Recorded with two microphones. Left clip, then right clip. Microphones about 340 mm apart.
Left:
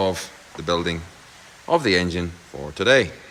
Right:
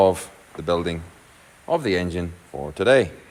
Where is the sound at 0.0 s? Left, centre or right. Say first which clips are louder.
Right 5 dB; centre.